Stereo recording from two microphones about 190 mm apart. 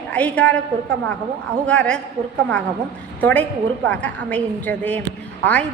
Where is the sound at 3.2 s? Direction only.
10° left (ahead or behind).